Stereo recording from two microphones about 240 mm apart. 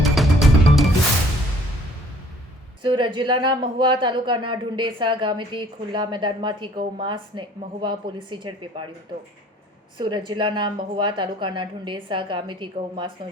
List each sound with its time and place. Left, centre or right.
0.0 s music: centre
2.8 s speech: centre
10.0 s speech: centre